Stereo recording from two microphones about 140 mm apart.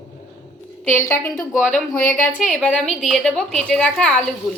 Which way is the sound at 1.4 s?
5° left (ahead or behind).